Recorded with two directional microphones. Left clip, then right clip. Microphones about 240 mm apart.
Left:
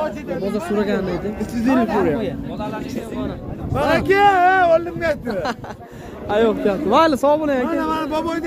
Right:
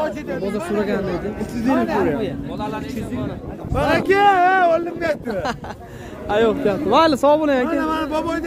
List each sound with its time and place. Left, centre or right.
0.4 s speech: centre
1.4 s speech: left
3.7 s speech: centre
7.6 s speech: centre